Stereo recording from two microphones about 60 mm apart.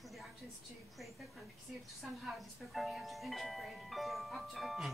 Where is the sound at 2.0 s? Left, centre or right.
Centre.